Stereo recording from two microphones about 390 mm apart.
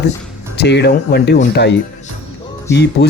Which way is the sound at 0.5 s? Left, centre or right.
Left.